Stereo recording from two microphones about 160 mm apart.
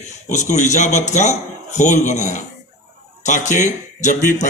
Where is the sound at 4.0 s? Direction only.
50° left (ahead or behind).